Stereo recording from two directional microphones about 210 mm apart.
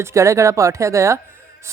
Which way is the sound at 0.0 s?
15° right (ahead or behind).